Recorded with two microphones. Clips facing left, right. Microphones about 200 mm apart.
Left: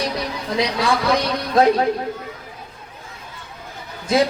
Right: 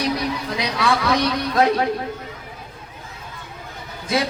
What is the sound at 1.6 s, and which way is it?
Speech, 30° left (ahead or behind).